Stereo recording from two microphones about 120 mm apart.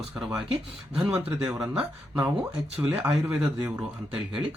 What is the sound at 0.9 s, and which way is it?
A man's voice, 10° right (ahead or behind).